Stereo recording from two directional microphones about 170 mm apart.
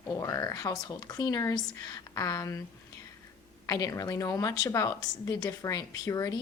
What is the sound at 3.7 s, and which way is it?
Speech, 20° left (ahead or behind).